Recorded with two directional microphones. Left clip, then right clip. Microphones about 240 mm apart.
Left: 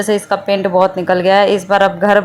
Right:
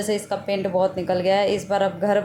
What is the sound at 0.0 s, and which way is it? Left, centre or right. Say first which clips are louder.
Speech: left 9 dB; centre.